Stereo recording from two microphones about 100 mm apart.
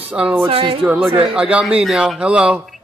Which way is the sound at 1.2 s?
10° right (ahead or behind).